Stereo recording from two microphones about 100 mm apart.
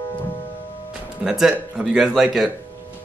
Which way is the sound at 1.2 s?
5° right (ahead or behind).